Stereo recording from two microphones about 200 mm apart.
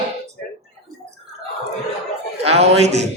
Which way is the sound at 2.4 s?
30° right (ahead or behind).